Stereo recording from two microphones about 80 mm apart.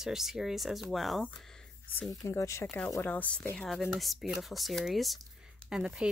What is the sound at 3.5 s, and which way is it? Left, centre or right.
A woman's voice, centre.